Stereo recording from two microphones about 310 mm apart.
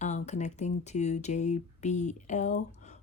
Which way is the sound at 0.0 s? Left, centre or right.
Left.